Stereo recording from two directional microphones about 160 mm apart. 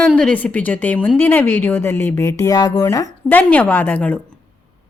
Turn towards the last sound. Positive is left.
turn(degrees=10)  # may be behind; listen again after turning